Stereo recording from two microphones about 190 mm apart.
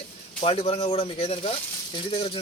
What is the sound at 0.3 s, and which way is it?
Speech, 30° left (ahead or behind).